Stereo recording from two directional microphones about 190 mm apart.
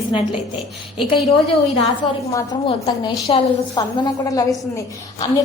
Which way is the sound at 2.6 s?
30° left (ahead or behind).